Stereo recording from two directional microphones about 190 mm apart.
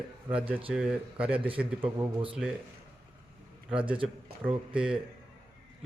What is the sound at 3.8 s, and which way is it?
Speech, 25° right (ahead or behind).